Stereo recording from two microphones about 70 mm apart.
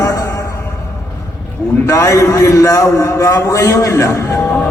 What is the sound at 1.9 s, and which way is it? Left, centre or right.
A man's voice, left.